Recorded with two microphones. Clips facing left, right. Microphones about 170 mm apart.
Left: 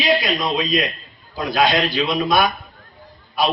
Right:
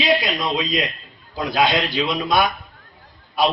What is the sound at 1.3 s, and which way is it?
Speech, 20° right (ahead or behind).